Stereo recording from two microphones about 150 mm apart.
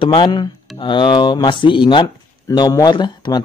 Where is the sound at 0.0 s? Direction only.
35° left (ahead or behind).